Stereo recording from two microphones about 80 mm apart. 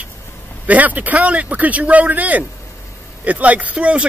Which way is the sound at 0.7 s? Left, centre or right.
Centre.